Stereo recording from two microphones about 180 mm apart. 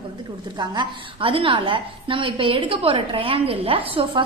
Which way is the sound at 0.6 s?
25° right (ahead or behind).